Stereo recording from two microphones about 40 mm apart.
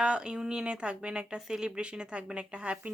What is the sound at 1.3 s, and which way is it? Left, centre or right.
Speech, centre.